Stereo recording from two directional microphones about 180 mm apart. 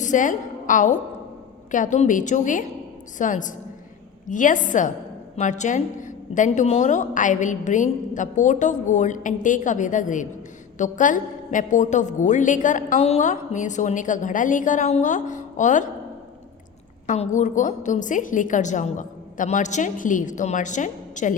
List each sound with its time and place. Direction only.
0.0 s a woman's voice: 45° left (ahead or behind)
17.1 s a woman's voice: 40° left (ahead or behind)